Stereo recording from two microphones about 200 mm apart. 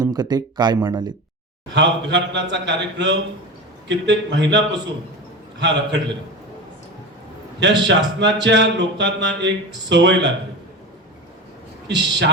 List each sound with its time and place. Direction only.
0.0 s speech: 20° right (ahead or behind)
1.7 s a man's voice: 60° right (ahead or behind)
7.6 s a man's voice: 60° right (ahead or behind)
11.9 s a man's voice: 60° right (ahead or behind)